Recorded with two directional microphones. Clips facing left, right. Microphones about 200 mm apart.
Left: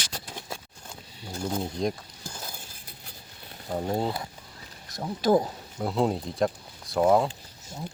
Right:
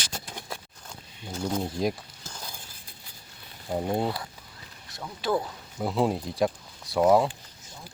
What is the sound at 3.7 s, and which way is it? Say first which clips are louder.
Speech: right 1 dB; 10° right (ahead or behind).